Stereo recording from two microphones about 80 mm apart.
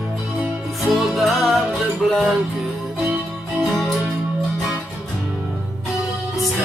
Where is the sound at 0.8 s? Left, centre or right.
Centre.